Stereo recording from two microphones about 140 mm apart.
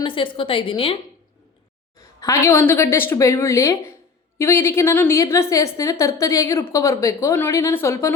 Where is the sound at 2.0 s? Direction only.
25° left (ahead or behind).